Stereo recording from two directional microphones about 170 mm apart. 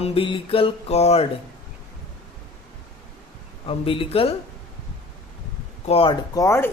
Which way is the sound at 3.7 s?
35° left (ahead or behind).